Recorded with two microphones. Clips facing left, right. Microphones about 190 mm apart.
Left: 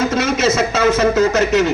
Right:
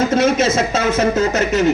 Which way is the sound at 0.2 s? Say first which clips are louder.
Right 1 dB; 55° right (ahead or behind).